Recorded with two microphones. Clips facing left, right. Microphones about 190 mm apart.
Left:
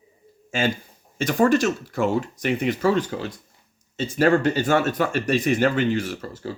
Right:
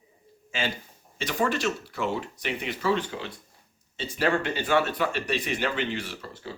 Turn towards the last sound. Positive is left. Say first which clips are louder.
# left 7 dB
turn(degrees=45)  # may be behind; listen again after turning